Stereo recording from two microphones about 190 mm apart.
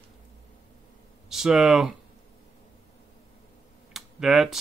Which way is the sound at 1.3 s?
Centre (ahead or behind).